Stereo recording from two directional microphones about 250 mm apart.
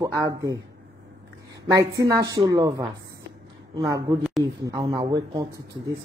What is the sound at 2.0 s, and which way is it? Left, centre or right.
Speech, centre.